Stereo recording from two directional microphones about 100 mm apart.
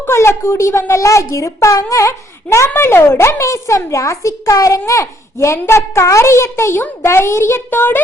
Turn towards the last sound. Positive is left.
turn(degrees=20)  # may be behind; listen again after turning